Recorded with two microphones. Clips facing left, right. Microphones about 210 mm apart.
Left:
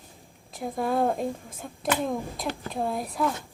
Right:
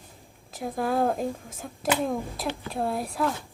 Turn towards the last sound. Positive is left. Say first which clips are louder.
# even
turn(degrees=0)  # may be behind; listen again after turning